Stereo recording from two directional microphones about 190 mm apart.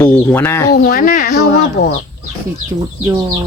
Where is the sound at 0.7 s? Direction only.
50° left (ahead or behind).